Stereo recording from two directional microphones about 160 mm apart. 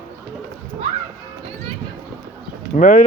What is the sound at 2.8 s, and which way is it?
Speech, 55° left (ahead or behind).